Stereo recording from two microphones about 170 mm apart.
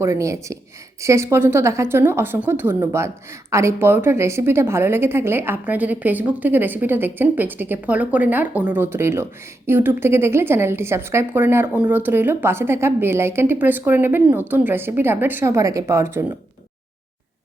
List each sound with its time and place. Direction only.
0.0 s a woman's voice: 15° right (ahead or behind)